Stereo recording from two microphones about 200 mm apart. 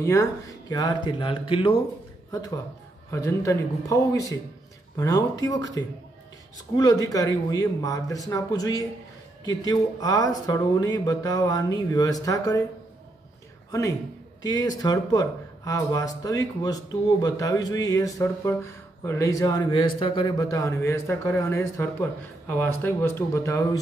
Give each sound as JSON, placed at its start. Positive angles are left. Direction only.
{"t": 0.0, "sound": "speech", "side_deg": 15}
{"t": 3.1, "sound": "speech", "side_deg": 15}
{"t": 13.7, "sound": "a man's voice", "side_deg": 15}